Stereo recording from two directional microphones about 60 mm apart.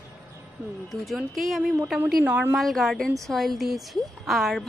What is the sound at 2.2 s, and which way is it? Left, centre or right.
Speech, right.